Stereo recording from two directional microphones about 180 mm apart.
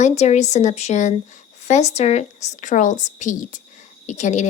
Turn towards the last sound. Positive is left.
turn(degrees=40)  # may be behind; listen again after turning